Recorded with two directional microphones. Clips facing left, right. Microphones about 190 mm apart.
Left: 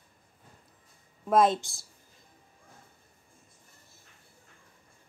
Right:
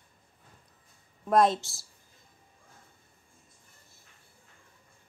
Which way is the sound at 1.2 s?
Centre (ahead or behind).